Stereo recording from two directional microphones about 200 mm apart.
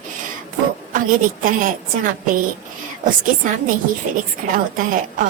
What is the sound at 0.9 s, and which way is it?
A woman's voice, 40° right (ahead or behind).